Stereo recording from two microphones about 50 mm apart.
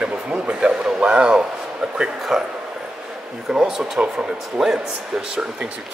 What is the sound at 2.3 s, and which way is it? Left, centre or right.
Speech, centre.